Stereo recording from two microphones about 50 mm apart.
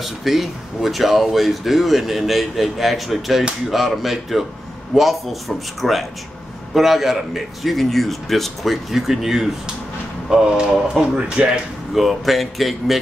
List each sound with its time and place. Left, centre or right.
0.0 s speech: centre
11.9 s speech: centre